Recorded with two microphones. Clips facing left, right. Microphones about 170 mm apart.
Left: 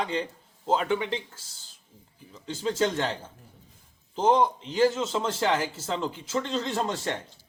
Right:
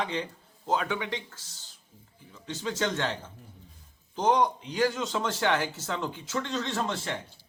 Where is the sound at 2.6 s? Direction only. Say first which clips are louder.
Left 4 dB; 30° left (ahead or behind).